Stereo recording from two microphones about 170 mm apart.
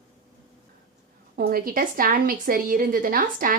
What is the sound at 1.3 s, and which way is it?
A woman's voice, 60° right (ahead or behind).